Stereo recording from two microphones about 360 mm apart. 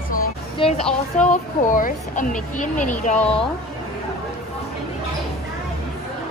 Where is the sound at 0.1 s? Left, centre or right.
Centre.